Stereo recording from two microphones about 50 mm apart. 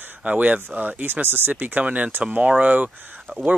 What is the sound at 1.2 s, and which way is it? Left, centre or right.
Speech, right.